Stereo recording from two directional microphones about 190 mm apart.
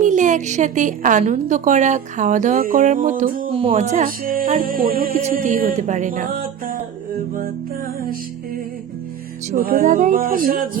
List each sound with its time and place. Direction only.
0.0 s a woman's voice: 40° right (ahead or behind)
3.5 s speech: 30° right (ahead or behind)
9.5 s speech: 50° right (ahead or behind)